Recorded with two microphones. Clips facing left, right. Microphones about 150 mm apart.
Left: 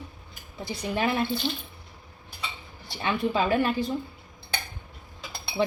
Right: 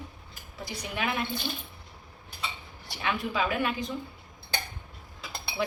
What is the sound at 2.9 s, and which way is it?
Speech, 30° left (ahead or behind).